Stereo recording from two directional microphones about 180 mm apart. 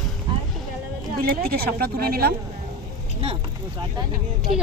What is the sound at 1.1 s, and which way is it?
Speech, 55° right (ahead or behind).